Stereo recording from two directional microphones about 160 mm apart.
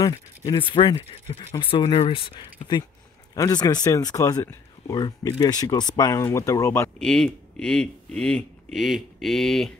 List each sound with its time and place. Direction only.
0.5 s speech: 30° left (ahead or behind)
3.3 s a man's voice: 20° left (ahead or behind)
7.0 s speech: 5° left (ahead or behind)